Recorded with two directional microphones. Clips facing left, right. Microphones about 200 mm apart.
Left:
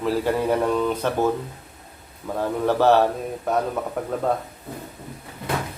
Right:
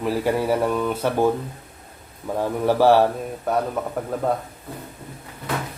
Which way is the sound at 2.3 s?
10° right (ahead or behind).